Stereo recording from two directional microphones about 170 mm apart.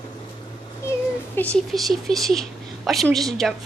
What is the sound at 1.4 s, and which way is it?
Speech, 5° left (ahead or behind).